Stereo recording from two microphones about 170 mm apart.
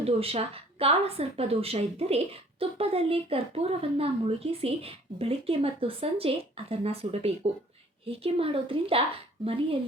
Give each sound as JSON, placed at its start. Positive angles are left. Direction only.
{"t": 0.0, "sound": "speech", "side_deg": -35}